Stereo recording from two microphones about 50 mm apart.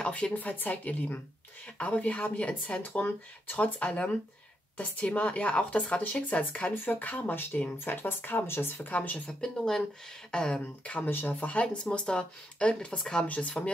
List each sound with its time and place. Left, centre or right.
0.0 s a sound: left
0.3 s speech: left
6.7 s speech: left
8.8 s speech: left
9.4 s speech: centre
10.6 s speech: left
11.1 s speech: left
11.3 s speech: left
13.3 s speech: left